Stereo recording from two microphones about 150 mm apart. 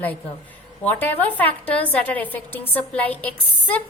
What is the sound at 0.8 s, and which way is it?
A woman's voice, 10° left (ahead or behind).